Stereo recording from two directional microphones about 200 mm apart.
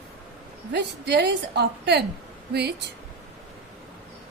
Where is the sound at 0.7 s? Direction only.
60° right (ahead or behind).